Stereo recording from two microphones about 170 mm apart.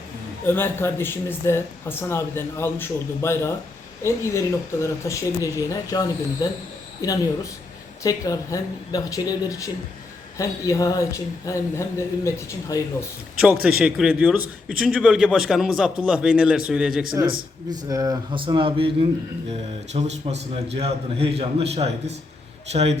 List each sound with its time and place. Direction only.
0.4 s speech: 15° left (ahead or behind)
8.0 s speech: 20° left (ahead or behind)
13.4 s a man's voice: 5° right (ahead or behind)
17.7 s a man's voice: 20° right (ahead or behind); by 23.0 s 40° right (ahead or behind)